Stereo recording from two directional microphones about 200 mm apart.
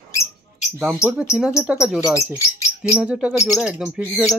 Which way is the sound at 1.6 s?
5° right (ahead or behind).